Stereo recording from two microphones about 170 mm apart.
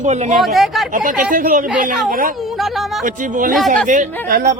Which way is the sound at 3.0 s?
50° right (ahead or behind).